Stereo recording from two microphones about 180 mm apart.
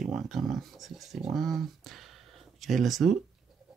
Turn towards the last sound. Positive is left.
turn(degrees=0)  # may be behind; listen again after turning